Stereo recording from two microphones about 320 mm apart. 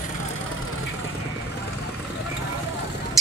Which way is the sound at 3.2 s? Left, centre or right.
Centre.